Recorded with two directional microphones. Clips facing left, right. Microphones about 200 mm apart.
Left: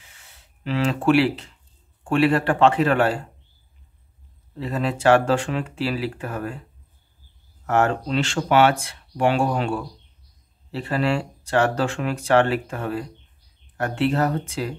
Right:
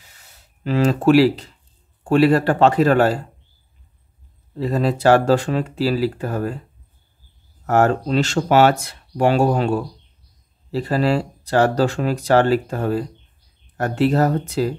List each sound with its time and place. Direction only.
0.0 s a sound: 40° right (ahead or behind)
2.0 s speech: 40° right (ahead or behind)
4.6 s speech: 40° right (ahead or behind)
7.6 s speech: 40° right (ahead or behind)